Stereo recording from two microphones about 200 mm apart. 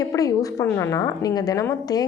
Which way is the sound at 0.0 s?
15° left (ahead or behind).